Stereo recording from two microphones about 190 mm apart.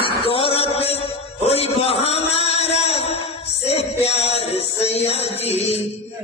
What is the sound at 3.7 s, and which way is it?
Music, 35° left (ahead or behind).